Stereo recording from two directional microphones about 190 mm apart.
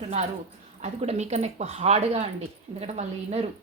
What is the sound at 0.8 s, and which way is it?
Speech, 35° right (ahead or behind).